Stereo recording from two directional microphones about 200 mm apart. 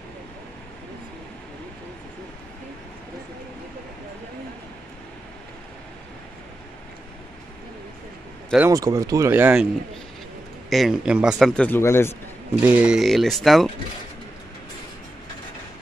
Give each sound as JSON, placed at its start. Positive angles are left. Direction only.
{"t": 8.6, "sound": "speech", "side_deg": -15}
{"t": 10.7, "sound": "a man's voice", "side_deg": 0}
{"t": 12.6, "sound": "a man's voice", "side_deg": -5}